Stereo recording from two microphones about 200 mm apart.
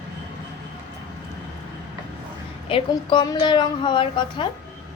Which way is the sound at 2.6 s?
25° left (ahead or behind).